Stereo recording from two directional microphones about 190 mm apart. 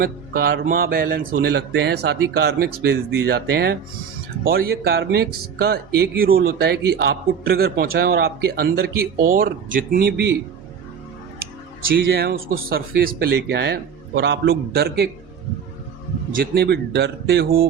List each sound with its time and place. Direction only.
0.0 s mantra: 55° right (ahead or behind)
0.6 s speech: 50° right (ahead or behind)
11.9 s speech: 55° right (ahead or behind)
16.4 s speech: 60° right (ahead or behind)